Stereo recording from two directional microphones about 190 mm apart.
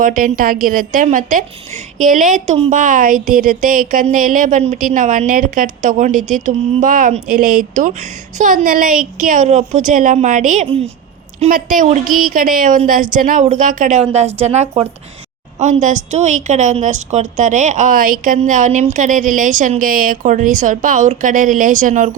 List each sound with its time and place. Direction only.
0.0 s a woman's voice: 45° right (ahead or behind)